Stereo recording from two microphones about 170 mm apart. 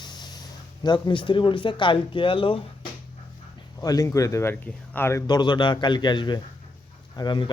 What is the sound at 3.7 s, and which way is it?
Speech, 20° left (ahead or behind).